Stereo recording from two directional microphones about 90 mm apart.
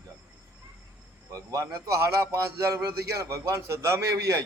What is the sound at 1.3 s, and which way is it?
A man's voice, 35° right (ahead or behind).